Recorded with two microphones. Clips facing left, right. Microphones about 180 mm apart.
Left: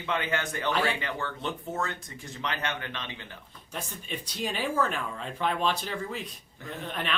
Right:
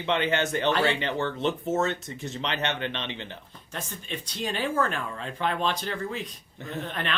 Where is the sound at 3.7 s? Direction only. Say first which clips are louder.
Right 1 dB; 5° left (ahead or behind).